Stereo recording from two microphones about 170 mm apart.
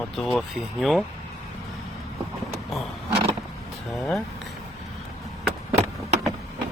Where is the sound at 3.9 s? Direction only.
Centre (ahead or behind).